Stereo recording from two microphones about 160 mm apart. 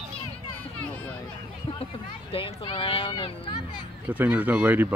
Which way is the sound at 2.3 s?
35° left (ahead or behind).